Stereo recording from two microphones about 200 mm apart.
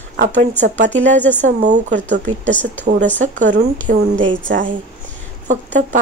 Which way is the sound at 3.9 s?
50° right (ahead or behind).